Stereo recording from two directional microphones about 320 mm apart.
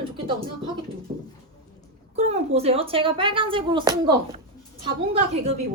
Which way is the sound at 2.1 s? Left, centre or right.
Centre.